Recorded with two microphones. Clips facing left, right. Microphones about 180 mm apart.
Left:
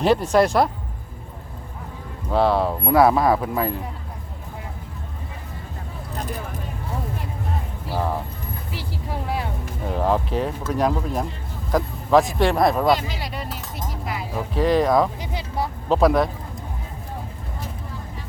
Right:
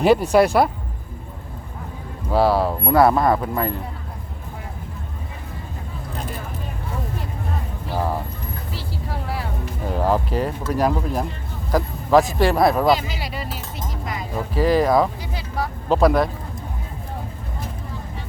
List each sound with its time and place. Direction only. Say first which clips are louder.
0.0 s speech: right 2 dB; 10° right (ahead or behind)
2.3 s speech: right 1 dB; 5° right (ahead or behind)
8.7 s vehicle: left 1 dB; 15° left (ahead or behind)
9.8 s speech: right 1 dB; centre (ahead or behind)
15.2 s speech: even; 20° left (ahead or behind)
15.9 s speech: right 1 dB; centre (ahead or behind)